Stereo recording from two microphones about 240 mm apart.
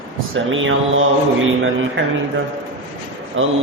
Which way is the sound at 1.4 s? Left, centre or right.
Right.